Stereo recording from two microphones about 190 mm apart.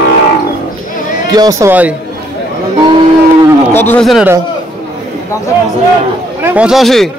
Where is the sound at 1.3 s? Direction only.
20° right (ahead or behind).